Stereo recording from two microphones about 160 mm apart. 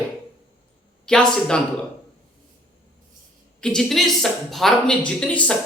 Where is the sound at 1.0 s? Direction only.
5° left (ahead or behind).